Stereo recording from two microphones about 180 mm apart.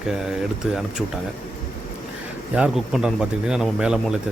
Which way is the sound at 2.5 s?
5° right (ahead or behind).